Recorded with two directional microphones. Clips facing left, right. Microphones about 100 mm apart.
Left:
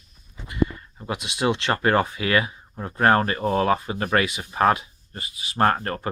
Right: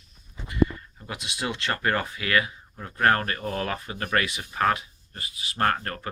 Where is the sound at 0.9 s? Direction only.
25° left (ahead or behind).